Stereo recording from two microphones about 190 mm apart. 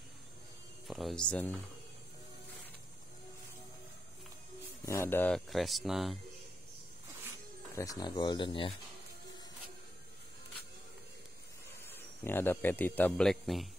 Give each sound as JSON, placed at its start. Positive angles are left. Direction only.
{"t": 0.8, "sound": "speech", "side_deg": 0}
{"t": 4.8, "sound": "speech", "side_deg": 15}
{"t": 7.7, "sound": "speech", "side_deg": 20}
{"t": 11.9, "sound": "speech", "side_deg": 10}